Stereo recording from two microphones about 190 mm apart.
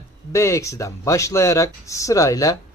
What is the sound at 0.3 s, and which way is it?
Speech, 15° left (ahead or behind).